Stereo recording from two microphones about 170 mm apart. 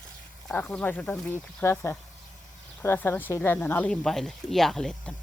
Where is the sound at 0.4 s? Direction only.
10° left (ahead or behind).